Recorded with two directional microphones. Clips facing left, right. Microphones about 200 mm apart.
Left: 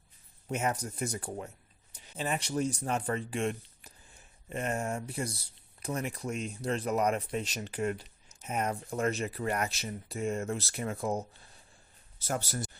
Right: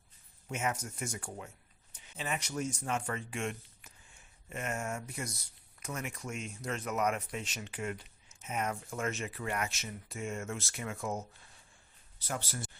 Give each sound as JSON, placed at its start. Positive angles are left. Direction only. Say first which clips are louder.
{"t": 0.4, "sound": "speech", "louder": "left 4 dB", "side_deg": 35}